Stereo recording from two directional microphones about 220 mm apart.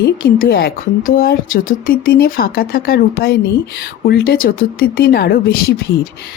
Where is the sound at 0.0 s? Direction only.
45° left (ahead or behind).